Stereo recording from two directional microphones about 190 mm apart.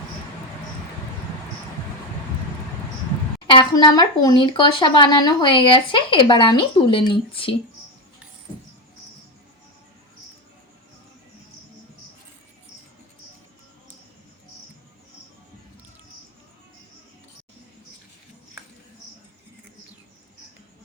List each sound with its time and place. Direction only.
3.4 s speech: 25° left (ahead or behind)